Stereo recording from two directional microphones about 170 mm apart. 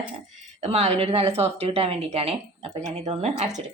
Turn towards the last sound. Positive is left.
turn(degrees=-40)  # may be behind; listen again after turning